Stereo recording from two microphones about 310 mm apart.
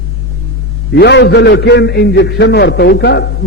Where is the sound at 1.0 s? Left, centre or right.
Left.